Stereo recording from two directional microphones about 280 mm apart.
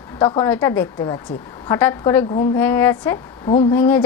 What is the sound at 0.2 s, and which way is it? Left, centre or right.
A woman's voice, centre.